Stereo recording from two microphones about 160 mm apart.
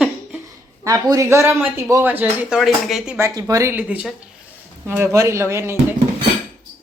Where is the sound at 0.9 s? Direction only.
20° right (ahead or behind).